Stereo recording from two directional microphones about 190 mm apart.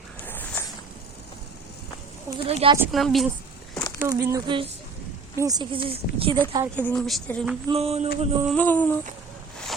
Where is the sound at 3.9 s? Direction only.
20° right (ahead or behind).